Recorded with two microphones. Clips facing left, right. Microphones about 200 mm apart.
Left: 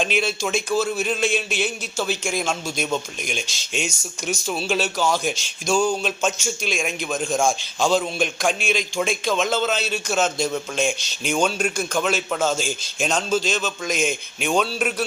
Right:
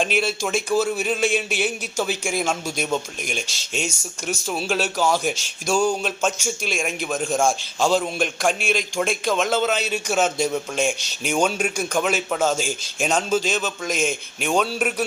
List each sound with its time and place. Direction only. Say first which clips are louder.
0.0 s a man's voice: even; 5° right (ahead or behind)
13.9 s a man's voice: even; centre (ahead or behind)
14.4 s a man's voice: even; 10° right (ahead or behind)